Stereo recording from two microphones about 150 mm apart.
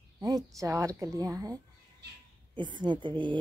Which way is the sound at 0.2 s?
25° right (ahead or behind).